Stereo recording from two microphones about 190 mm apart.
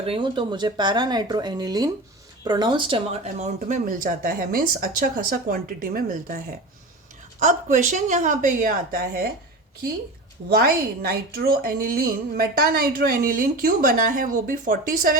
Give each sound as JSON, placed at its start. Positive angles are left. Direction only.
{"t": 0.0, "sound": "a woman's voice", "side_deg": -25}
{"t": 10.5, "sound": "a woman's voice", "side_deg": -55}